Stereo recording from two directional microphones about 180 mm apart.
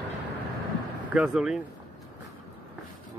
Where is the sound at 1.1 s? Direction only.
5° right (ahead or behind).